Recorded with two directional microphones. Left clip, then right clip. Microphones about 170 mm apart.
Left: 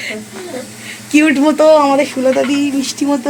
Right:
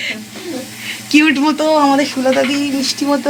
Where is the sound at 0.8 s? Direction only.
5° left (ahead or behind).